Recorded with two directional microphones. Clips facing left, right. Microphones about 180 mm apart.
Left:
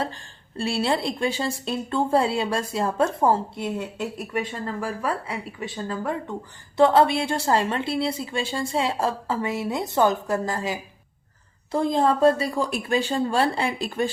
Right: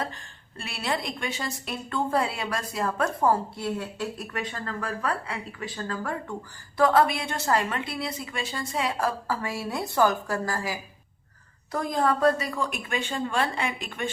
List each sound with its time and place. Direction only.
0.5 s a woman's voice: 30° left (ahead or behind)